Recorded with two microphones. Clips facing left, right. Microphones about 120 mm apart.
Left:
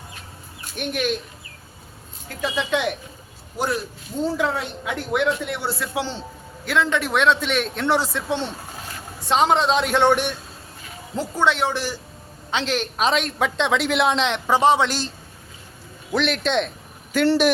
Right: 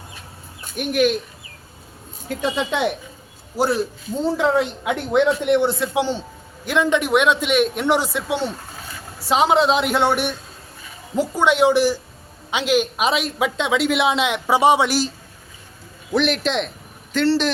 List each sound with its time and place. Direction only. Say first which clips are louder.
0.8 s a man's voice: right 6 dB; 5° right (ahead or behind)
2.3 s a man's voice: right 2 dB; 25° right (ahead or behind)
4.4 s a man's voice: right 5 dB; 20° right (ahead or behind)
16.1 s a man's voice: right 1 dB; centre (ahead or behind)
17.1 s speech: left 1 dB; 10° left (ahead or behind)